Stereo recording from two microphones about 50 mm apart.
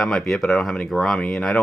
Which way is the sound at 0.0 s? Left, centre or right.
Centre.